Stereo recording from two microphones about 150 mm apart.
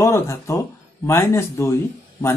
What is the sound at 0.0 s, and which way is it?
Speech, 20° left (ahead or behind).